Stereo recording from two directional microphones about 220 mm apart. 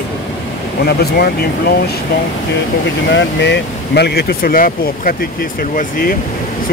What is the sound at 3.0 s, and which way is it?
Speech, 55° left (ahead or behind).